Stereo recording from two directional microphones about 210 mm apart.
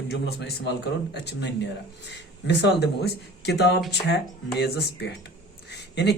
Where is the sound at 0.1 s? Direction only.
50° left (ahead or behind).